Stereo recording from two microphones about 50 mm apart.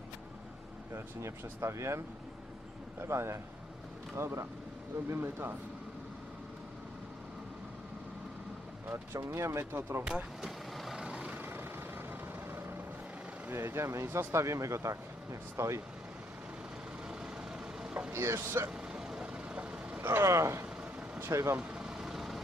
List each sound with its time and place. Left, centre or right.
0.9 s speech: right
8.9 s speech: right
10.4 s vehicle: centre
11.0 s vehicle: centre
11.3 s vehicle: right
13.6 s speech: right
17.1 s vehicle: centre
18.1 s speech: right
18.7 s hiccup: centre
20.0 s speech: right
20.2 s speech: right
21.5 s vehicle: centre